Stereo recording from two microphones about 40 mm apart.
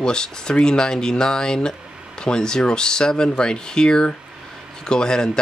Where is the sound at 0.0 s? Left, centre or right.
Centre.